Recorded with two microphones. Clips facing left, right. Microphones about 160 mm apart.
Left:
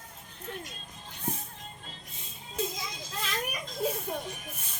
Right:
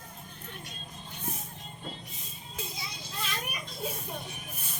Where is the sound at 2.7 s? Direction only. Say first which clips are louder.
Left 3 dB; 90° left.